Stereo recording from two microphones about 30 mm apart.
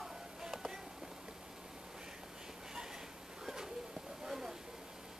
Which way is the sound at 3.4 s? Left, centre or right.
Centre.